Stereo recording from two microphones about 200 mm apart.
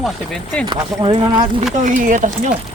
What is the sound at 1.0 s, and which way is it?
Speech, 25° right (ahead or behind).